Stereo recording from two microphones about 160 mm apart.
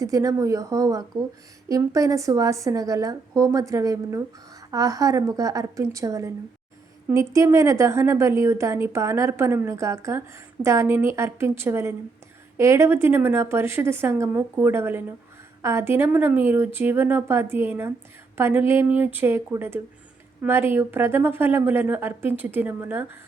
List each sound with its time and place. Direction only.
0.0 s a woman's voice: 20° right (ahead or behind)